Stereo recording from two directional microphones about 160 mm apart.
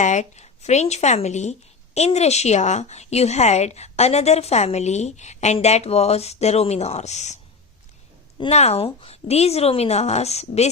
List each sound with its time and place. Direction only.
0.0 s a woman's voice: 50° left (ahead or behind)
8.4 s a woman's voice: 40° left (ahead or behind)